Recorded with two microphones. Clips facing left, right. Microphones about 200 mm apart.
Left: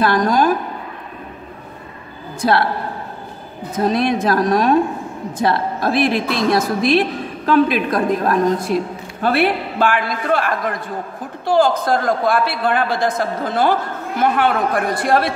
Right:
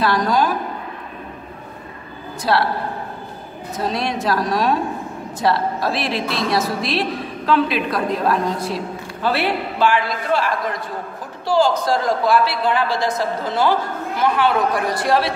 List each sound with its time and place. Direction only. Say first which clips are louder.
0.0 s a woman's voice: left 3 dB; 50° left (ahead or behind)
3.7 s a woman's voice: left 6 dB; 50° left (ahead or behind)